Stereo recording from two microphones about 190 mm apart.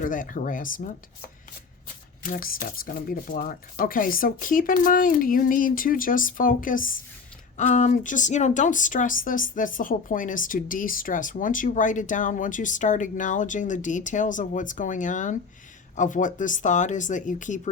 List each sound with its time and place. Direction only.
0.0 s speech: 45° left (ahead or behind)
2.2 s speech: 45° left (ahead or behind)